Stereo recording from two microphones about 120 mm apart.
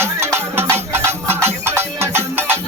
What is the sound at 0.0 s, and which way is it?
Music, 20° right (ahead or behind).